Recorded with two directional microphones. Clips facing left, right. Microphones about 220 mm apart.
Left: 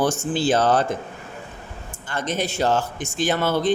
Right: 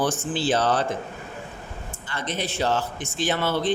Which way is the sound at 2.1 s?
45° left (ahead or behind).